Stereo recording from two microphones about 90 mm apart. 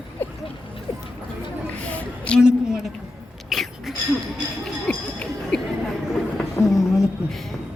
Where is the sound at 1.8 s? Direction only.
15° left (ahead or behind).